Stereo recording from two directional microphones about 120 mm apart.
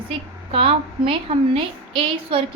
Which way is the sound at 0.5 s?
50° right (ahead or behind).